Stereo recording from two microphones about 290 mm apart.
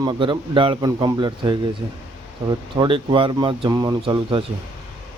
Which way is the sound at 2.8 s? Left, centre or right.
Centre.